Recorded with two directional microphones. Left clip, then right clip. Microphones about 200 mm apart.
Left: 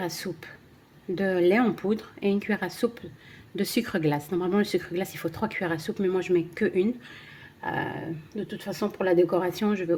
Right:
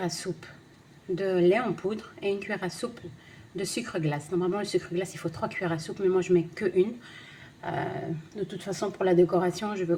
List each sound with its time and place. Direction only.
0.0 s speech: 40° left (ahead or behind)